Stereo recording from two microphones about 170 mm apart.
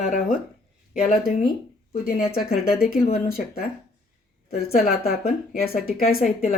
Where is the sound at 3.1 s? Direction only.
60° left (ahead or behind).